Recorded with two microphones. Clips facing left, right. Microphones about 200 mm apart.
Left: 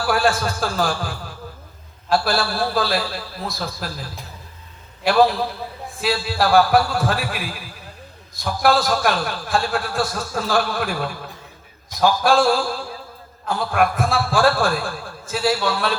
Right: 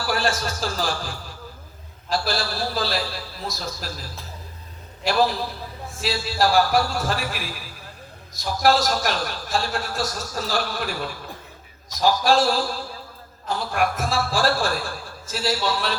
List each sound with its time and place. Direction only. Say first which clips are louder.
0.0 s a man's voice: left 5 dB; 55° left (ahead or behind)
5.0 s a man's voice: left 5 dB; 55° left (ahead or behind)
8.4 s a man's voice: left 1 dB; 55° left (ahead or behind)